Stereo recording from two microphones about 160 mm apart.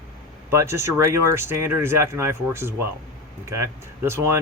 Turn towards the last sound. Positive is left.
turn(degrees=-15)  # may be behind; listen again after turning